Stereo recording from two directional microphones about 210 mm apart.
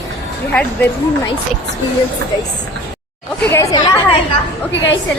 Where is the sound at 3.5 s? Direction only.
15° left (ahead or behind).